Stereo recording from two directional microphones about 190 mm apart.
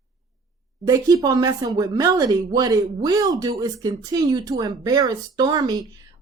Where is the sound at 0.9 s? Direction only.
15° right (ahead or behind).